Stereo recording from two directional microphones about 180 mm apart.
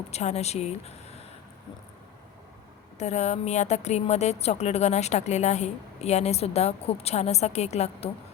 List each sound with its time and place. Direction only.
0.1 s a woman's voice: 40° left (ahead or behind)
3.0 s a woman's voice: 40° left (ahead or behind)